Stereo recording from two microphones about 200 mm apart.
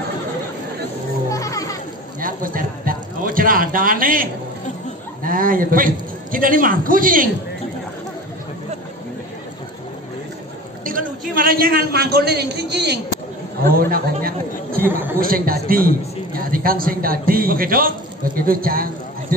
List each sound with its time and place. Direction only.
1.3 s music: 15° left (ahead or behind)
2.1 s a sound: 45° right (ahead or behind)
5.2 s a man's voice: 45° right (ahead or behind)
10.9 s a man's voice: 45° right (ahead or behind)
14.8 s speech: 10° right (ahead or behind)
15.1 s a man's voice: 45° right (ahead or behind)